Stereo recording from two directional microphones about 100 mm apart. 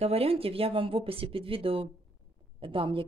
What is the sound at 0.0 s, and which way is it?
A woman's voice, 75° right (ahead or behind).